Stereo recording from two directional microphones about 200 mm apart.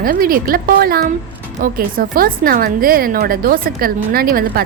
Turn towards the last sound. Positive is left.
turn(degrees=-50)  # may be behind; listen again after turning